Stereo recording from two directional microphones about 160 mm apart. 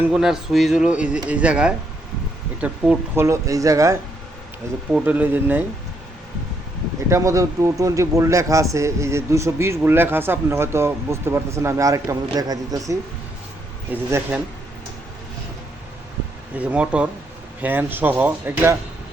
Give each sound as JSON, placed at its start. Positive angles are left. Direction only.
{"t": 0.1, "sound": "a man's voice", "side_deg": -5}
{"t": 4.9, "sound": "speech", "side_deg": -10}
{"t": 7.1, "sound": "speech", "side_deg": -20}
{"t": 13.9, "sound": "speech", "side_deg": -10}
{"t": 16.6, "sound": "speech", "side_deg": -10}